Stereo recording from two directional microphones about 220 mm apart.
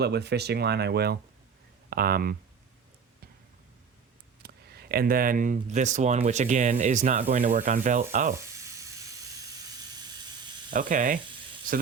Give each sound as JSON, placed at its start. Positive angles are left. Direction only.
{"t": 0.0, "sound": "speech", "side_deg": -50}
{"t": 4.4, "sound": "speech", "side_deg": -45}
{"t": 10.7, "sound": "speech", "side_deg": -35}